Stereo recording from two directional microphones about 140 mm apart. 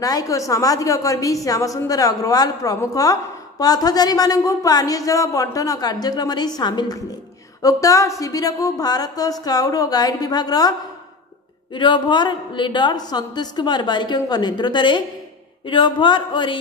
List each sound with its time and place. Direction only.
0.0 s a woman's voice: 25° left (ahead or behind)
11.7 s a woman's voice: 35° left (ahead or behind)